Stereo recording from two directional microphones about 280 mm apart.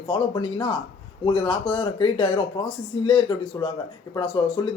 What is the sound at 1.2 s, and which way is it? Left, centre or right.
Speech, centre.